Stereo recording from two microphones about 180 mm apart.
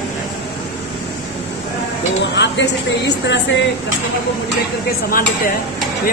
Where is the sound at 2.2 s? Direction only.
80° left.